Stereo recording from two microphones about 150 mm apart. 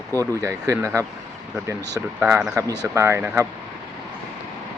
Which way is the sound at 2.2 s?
5° right (ahead or behind).